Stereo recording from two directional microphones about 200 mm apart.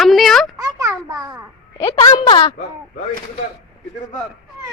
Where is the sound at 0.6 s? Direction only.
15° right (ahead or behind).